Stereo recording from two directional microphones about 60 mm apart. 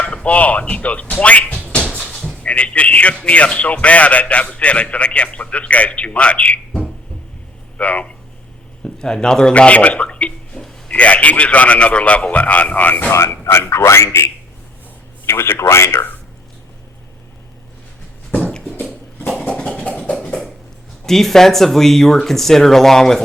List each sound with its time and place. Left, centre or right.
0.0 s speech: centre
2.0 s sheep: centre
2.4 s a man's voice: left
8.8 s a man's voice: centre
10.6 s a sound: centre
10.9 s a man's voice: left
13.1 s a man's voice: left
15.3 s a man's voice: left
19.3 s a sound: centre
21.1 s speech: centre